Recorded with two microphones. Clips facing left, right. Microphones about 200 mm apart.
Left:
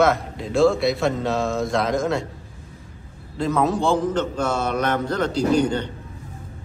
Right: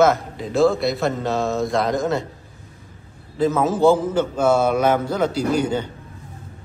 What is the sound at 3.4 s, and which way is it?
A man's voice, centre (ahead or behind).